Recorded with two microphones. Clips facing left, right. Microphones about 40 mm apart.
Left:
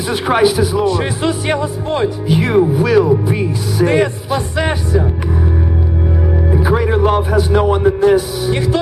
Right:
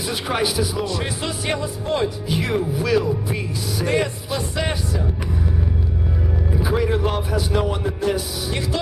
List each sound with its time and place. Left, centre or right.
0.1 s speech: left
6.5 s speech: left